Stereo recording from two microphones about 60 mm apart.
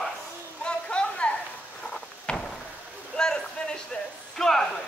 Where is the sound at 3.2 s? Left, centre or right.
Centre.